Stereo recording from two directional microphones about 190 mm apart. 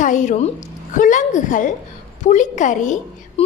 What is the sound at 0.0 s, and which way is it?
A woman's voice, 40° left (ahead or behind).